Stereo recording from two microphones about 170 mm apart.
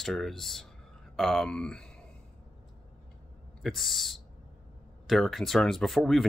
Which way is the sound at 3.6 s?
Centre (ahead or behind).